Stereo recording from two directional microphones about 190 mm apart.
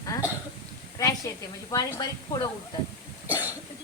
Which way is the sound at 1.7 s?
20° left (ahead or behind).